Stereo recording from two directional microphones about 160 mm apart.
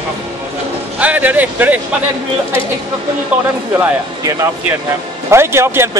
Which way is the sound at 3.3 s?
10° right (ahead or behind).